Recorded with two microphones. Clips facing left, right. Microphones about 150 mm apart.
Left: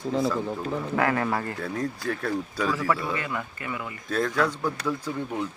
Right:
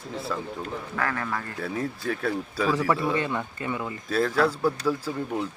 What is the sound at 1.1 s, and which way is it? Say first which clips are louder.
Speech: left 5 dB; 35° left (ahead or behind).